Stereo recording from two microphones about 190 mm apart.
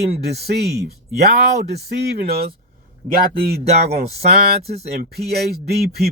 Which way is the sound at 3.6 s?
35° right (ahead or behind).